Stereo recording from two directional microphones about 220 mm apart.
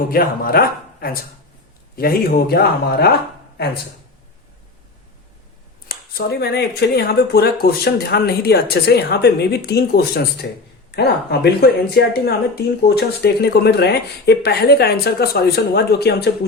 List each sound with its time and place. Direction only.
0.1 s speech: 40° left (ahead or behind)
5.9 s speech: 45° left (ahead or behind)